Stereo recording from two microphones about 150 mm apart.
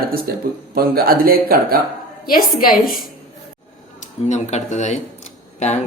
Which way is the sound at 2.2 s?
70° left (ahead or behind).